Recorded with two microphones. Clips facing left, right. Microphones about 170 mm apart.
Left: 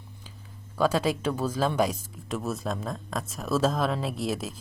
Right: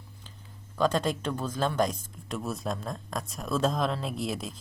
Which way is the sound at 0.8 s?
5° left (ahead or behind).